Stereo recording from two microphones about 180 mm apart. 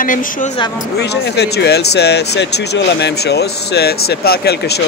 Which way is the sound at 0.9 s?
65° left (ahead or behind).